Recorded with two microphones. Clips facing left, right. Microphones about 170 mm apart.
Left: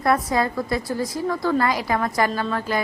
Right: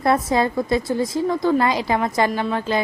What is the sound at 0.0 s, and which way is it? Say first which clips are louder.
A woman's voice: right 2 dB; 25° right (ahead or behind).